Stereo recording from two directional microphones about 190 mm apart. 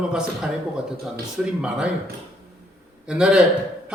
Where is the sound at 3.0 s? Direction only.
5° right (ahead or behind).